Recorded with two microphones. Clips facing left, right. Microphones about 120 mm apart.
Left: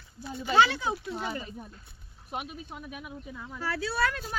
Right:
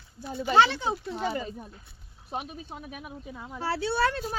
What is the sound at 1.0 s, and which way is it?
Speech, 45° right (ahead or behind).